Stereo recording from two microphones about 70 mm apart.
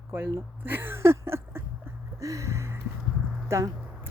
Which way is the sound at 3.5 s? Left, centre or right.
Right.